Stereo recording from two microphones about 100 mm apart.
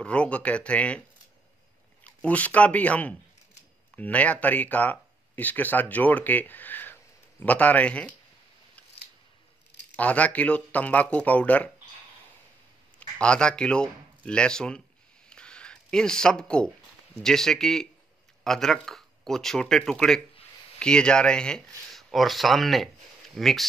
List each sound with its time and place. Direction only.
0.0 s speech: 10° left (ahead or behind)
2.0 s speech: 15° left (ahead or behind)
9.9 s speech: 15° left (ahead or behind)
13.2 s speech: 10° left (ahead or behind)
15.2 s a sound: 10° left (ahead or behind)
17.2 s speech: 5° left (ahead or behind)